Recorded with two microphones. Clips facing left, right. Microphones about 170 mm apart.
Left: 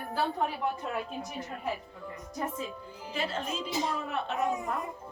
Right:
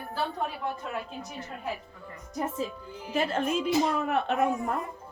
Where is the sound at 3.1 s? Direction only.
50° right (ahead or behind).